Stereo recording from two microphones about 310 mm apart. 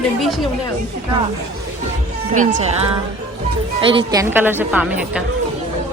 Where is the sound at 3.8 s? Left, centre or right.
Centre.